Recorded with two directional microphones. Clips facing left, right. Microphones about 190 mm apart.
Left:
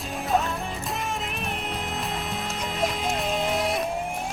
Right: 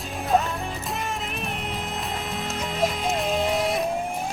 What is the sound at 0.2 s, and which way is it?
Music, centre (ahead or behind).